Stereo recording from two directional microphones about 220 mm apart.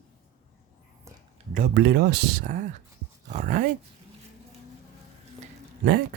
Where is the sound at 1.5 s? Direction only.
45° right (ahead or behind).